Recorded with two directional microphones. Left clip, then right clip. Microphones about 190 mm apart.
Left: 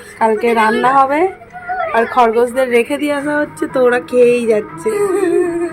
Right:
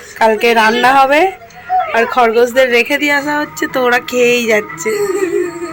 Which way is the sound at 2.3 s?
10° left (ahead or behind).